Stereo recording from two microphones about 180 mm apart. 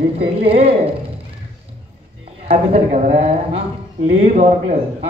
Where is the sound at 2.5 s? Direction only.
35° right (ahead or behind).